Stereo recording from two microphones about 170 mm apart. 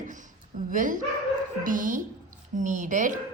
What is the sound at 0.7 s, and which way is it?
A woman's voice, 50° right (ahead or behind).